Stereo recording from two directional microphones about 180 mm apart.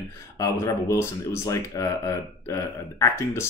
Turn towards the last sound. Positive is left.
turn(degrees=15)  # may be behind; listen again after turning